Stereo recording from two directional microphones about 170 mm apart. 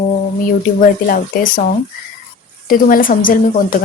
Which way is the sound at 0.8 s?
50° left (ahead or behind).